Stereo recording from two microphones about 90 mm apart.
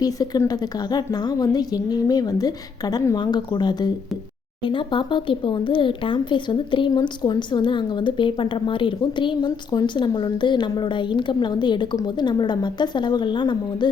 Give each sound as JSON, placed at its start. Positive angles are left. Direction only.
{"t": 0.0, "sound": "a woman's voice", "side_deg": 45}
{"t": 3.2, "sound": "a woman's voice", "side_deg": 55}
{"t": 4.6, "sound": "speech", "side_deg": 65}